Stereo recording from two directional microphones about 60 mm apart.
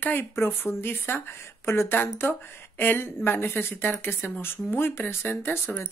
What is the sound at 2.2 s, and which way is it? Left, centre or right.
Speech, left.